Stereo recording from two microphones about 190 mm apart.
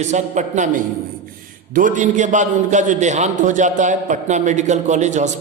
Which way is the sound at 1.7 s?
40° right (ahead or behind).